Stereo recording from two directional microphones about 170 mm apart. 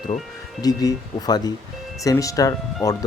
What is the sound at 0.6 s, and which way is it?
Speech, 20° left (ahead or behind).